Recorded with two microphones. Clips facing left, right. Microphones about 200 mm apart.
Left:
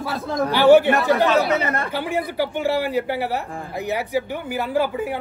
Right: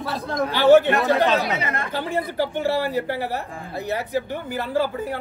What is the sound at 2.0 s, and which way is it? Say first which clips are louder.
Speech: right 1 dB; 15° left (ahead or behind).